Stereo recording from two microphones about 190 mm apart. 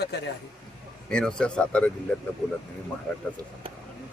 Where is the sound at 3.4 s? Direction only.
20° right (ahead or behind).